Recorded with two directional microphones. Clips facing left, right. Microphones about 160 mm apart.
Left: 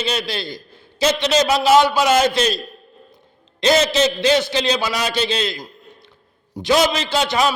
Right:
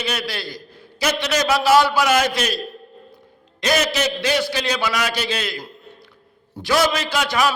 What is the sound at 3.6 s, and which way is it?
A man's voice, 25° left (ahead or behind).